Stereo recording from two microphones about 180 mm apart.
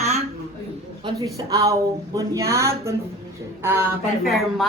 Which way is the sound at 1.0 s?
20° right (ahead or behind).